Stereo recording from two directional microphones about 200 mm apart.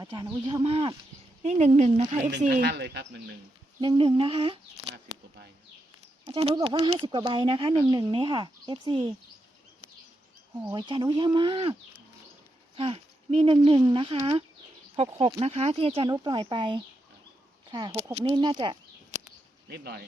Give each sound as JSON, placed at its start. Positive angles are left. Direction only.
{"t": 0.0, "sound": "speech", "side_deg": -20}
{"t": 2.6, "sound": "speech", "side_deg": -55}
{"t": 3.8, "sound": "speech", "side_deg": -25}
{"t": 6.2, "sound": "speech", "side_deg": -25}
{"t": 10.6, "sound": "speech", "side_deg": -20}
{"t": 19.6, "sound": "speech", "side_deg": -55}